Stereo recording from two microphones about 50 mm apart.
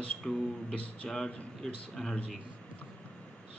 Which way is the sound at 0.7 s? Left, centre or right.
Left.